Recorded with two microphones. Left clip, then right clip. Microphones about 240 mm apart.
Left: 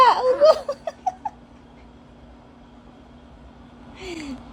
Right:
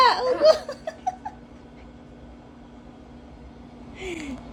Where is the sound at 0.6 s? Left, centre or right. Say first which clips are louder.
Left 3 dB; left.